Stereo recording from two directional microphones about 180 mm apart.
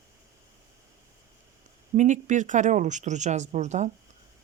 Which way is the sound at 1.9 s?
40° right (ahead or behind).